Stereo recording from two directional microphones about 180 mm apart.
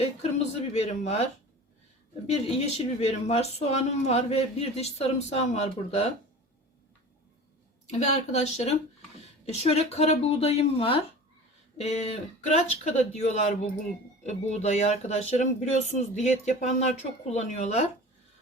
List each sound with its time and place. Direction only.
0.7 s speech: 35° left (ahead or behind)
2.3 s speech: 35° left (ahead or behind)
7.9 s speech: 40° left (ahead or behind)